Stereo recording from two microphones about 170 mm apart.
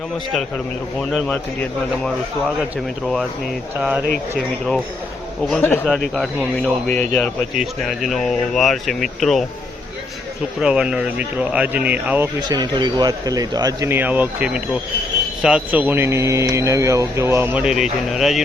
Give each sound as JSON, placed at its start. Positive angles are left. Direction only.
{"t": 3.8, "sound": "speech", "side_deg": -5}
{"t": 4.4, "sound": "speech", "side_deg": 5}
{"t": 7.5, "sound": "speech", "side_deg": 0}
{"t": 10.6, "sound": "speech", "side_deg": -5}
{"t": 12.4, "sound": "speech", "side_deg": -25}